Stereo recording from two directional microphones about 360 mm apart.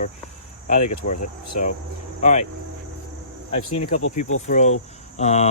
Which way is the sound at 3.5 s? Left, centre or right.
Centre.